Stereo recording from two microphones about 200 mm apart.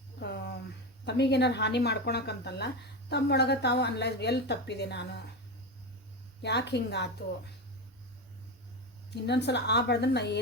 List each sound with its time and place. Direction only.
0.2 s a sound: 55° left (ahead or behind)
1.0 s speech: 60° left (ahead or behind)
6.4 s speech: 60° left (ahead or behind)
9.0 s speech: 55° left (ahead or behind)